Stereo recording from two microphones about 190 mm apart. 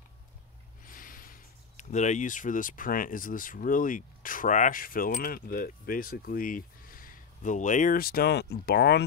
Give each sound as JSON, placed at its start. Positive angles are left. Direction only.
{"t": 0.8, "sound": "speech", "side_deg": 45}